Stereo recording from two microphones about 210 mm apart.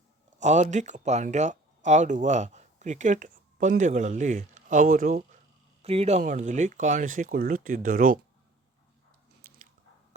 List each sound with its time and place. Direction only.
0.3 s speech: 35° right (ahead or behind)
5.8 s speech: 30° right (ahead or behind)
9.5 s biting: 45° right (ahead or behind)